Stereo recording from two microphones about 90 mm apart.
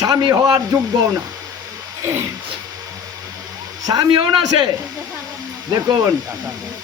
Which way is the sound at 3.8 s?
50° right (ahead or behind).